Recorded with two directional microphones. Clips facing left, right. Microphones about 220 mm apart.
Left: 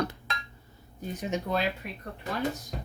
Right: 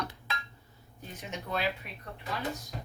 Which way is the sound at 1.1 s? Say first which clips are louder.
Left 7 dB; 40° left (ahead or behind).